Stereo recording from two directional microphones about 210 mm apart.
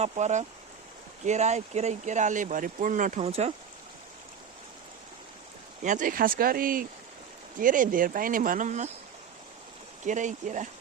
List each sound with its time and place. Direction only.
0.0 s speech: 35° right (ahead or behind)
5.8 s speech: 35° right (ahead or behind)
10.1 s speech: 35° right (ahead or behind)